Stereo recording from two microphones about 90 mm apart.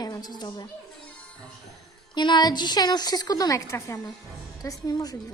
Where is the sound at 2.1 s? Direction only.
55° left (ahead or behind).